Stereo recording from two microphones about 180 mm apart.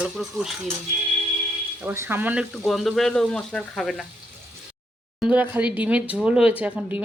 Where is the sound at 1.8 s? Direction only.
10° right (ahead or behind).